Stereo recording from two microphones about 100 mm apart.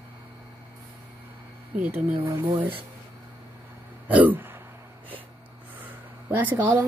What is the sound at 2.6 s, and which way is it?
Speech, 60° right (ahead or behind).